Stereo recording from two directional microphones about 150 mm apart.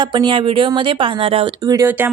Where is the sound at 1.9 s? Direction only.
10° right (ahead or behind).